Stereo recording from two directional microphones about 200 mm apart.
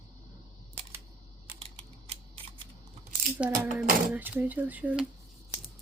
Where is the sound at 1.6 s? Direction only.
30° right (ahead or behind).